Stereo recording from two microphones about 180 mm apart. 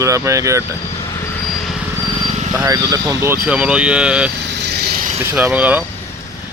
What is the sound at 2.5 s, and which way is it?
Speech, 20° right (ahead or behind).